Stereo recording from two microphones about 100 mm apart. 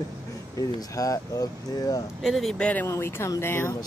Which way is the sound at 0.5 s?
35° left (ahead or behind).